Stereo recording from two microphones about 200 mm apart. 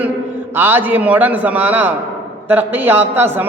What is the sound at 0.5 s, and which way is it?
A woman's voice, 10° right (ahead or behind).